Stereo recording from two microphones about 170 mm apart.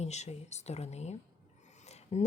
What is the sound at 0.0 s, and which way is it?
A woman's voice, 40° left (ahead or behind).